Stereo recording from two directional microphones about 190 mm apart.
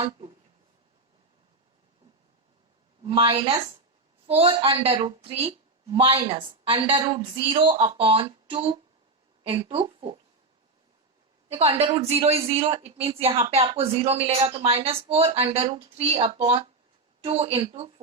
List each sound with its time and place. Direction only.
3.0 s a woman's voice: 30° right (ahead or behind)
11.4 s a woman's voice: 30° right (ahead or behind)